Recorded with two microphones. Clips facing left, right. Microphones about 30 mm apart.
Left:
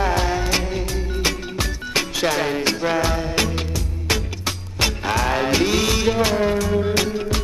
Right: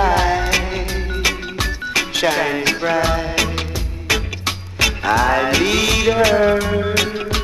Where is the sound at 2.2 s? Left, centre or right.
Right.